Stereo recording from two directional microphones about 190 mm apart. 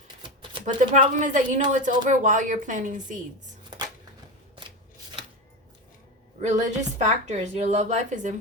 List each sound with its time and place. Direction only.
0.6 s a woman's voice: 40° right (ahead or behind)
6.4 s a woman's voice: 40° right (ahead or behind)